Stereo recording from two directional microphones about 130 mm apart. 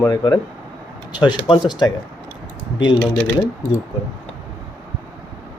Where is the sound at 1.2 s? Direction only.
35° left (ahead or behind).